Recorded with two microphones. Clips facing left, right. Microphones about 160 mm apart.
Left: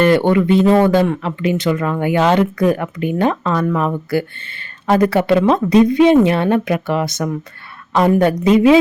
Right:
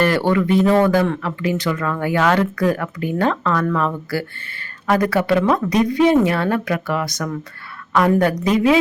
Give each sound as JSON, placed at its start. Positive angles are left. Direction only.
{"t": 0.0, "sound": "speech", "side_deg": 20}